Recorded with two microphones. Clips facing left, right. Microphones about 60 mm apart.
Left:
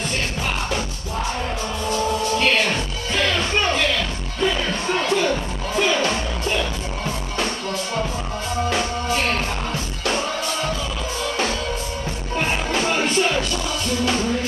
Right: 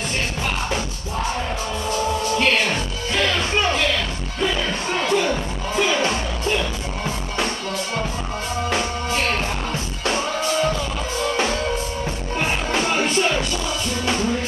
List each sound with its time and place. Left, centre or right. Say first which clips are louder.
2.3 s music: right 1 dB; centre
12.4 s music: even; centre